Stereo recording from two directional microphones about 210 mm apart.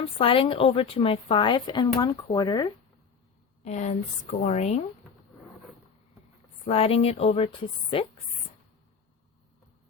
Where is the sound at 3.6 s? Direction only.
35° left (ahead or behind).